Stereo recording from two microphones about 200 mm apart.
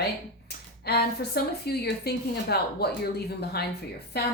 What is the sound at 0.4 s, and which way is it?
Speech, 55° left (ahead or behind).